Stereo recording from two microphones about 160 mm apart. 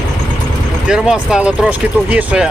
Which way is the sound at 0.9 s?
5° right (ahead or behind).